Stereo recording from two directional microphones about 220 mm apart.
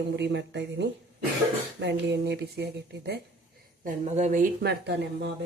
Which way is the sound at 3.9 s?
30° right (ahead or behind).